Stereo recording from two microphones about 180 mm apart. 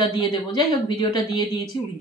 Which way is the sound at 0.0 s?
25° left (ahead or behind).